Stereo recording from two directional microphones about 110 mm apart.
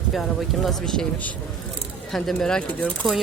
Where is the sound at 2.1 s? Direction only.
5° left (ahead or behind).